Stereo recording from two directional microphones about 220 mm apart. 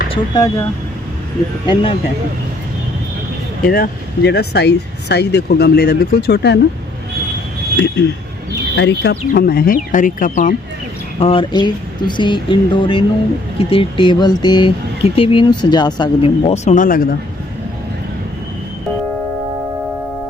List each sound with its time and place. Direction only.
0.1 s speech: 15° left (ahead or behind)
1.6 s speech: 25° left (ahead or behind)
3.7 s speech: 45° left (ahead or behind)
8.0 s speech: 50° left (ahead or behind)
11.2 s speech: 25° left (ahead or behind); by 17.2 s 40° left (ahead or behind)